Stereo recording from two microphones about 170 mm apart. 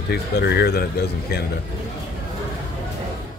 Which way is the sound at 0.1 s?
75° left (ahead or behind).